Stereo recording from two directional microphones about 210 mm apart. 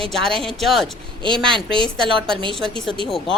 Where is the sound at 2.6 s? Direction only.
Centre (ahead or behind).